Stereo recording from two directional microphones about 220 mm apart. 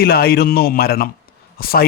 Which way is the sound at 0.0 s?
45° left (ahead or behind).